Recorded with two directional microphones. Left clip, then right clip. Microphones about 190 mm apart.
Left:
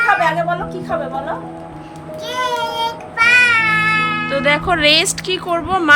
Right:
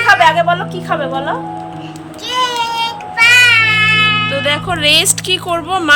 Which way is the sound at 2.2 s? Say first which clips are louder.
Right 4 dB; 15° left (ahead or behind).